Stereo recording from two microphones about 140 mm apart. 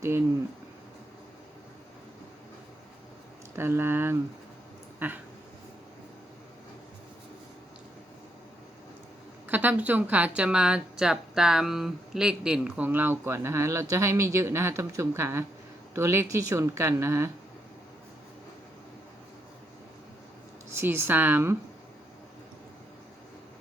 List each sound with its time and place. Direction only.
3.5 s speech: 15° right (ahead or behind)
4.9 s a sound: 15° right (ahead or behind)
9.5 s speech: 10° right (ahead or behind)
20.7 s speech: 15° right (ahead or behind)